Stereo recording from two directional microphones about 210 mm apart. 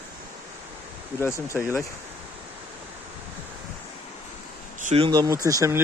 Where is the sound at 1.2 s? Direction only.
15° left (ahead or behind).